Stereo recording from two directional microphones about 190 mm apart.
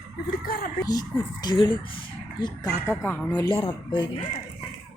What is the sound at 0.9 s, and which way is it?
Speech, 20° left (ahead or behind).